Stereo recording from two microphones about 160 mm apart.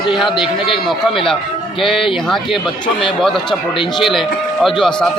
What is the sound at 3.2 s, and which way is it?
Speech, centre (ahead or behind).